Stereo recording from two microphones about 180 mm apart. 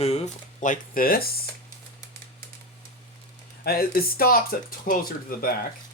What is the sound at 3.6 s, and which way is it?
Speech, 55° left (ahead or behind).